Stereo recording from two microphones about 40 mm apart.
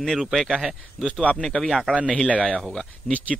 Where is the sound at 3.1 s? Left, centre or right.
Centre.